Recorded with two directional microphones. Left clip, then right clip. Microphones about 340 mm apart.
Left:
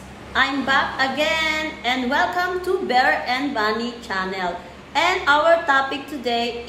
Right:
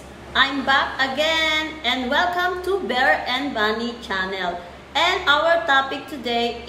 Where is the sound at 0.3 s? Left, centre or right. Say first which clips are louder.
Right 1 dB; centre.